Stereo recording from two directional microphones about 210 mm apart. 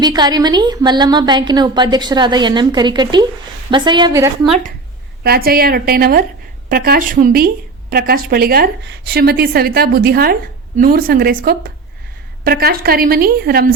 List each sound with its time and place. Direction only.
0.0 s a woman's voice: 20° right (ahead or behind)
5.2 s speech: 45° right (ahead or behind)